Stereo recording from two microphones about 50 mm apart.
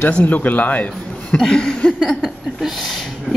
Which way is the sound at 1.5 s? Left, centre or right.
Centre.